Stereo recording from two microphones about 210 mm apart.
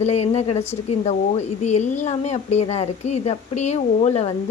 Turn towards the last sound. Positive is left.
turn(degrees=30)  # may be behind; listen again after turning